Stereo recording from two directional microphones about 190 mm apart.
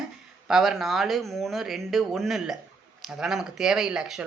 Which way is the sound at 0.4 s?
Centre (ahead or behind).